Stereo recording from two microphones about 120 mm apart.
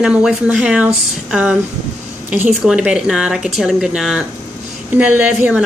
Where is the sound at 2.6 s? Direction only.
5° right (ahead or behind).